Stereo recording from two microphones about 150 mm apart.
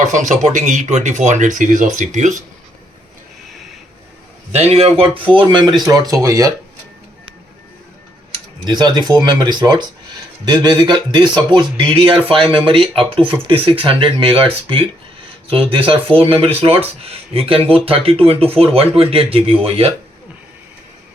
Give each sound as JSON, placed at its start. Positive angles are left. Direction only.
{"t": 0.1, "sound": "speech", "side_deg": -55}
{"t": 4.5, "sound": "speech", "side_deg": -45}
{"t": 8.6, "sound": "speech", "side_deg": -30}